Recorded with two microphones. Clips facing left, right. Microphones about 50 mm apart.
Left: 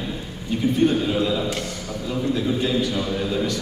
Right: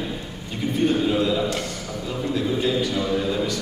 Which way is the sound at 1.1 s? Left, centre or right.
Centre.